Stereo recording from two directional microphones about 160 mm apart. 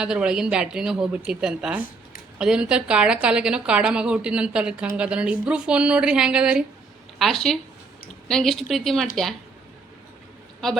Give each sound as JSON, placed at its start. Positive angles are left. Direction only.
{"t": 0.0, "sound": "a woman's voice", "side_deg": -5}